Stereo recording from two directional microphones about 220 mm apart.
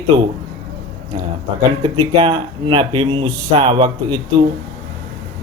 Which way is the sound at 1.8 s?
25° right (ahead or behind).